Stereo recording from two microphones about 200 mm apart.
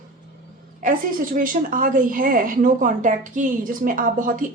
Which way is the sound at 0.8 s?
45° right (ahead or behind).